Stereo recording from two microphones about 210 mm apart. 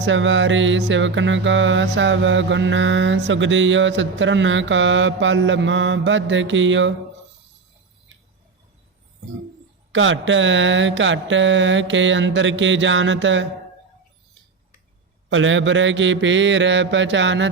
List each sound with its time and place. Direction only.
0.0 s music: 60° right (ahead or behind)
9.9 s music: 65° right (ahead or behind)
15.3 s music: 65° right (ahead or behind)